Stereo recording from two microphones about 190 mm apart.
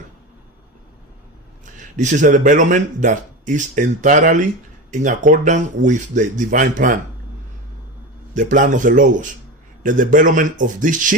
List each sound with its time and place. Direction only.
1.6 s speech: 40° right (ahead or behind)
8.3 s speech: 40° right (ahead or behind)